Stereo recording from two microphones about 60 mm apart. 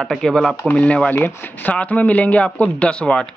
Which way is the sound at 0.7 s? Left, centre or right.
Left.